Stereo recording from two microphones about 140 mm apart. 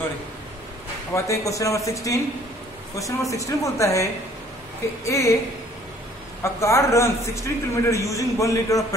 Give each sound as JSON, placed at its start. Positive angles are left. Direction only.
{"t": 1.1, "sound": "a man's voice", "side_deg": 20}
{"t": 6.4, "sound": "a man's voice", "side_deg": 20}